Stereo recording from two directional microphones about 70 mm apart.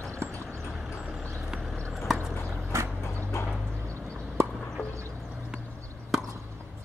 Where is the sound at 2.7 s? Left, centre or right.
Right.